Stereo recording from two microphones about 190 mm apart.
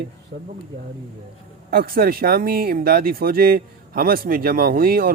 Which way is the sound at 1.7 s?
50° right (ahead or behind).